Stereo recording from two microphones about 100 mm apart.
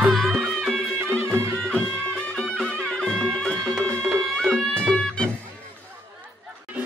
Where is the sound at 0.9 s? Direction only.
25° right (ahead or behind).